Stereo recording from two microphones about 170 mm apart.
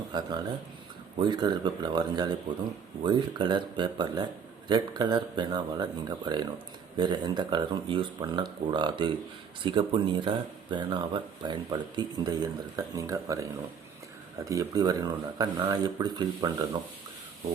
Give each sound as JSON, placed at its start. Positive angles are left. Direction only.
{"t": 0.1, "sound": "speech", "side_deg": -25}